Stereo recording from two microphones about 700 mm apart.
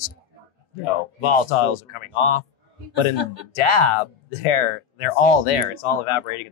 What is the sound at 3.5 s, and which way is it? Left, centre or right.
Speech, left.